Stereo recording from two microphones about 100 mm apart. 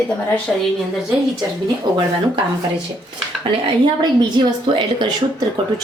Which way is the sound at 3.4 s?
50° right (ahead or behind).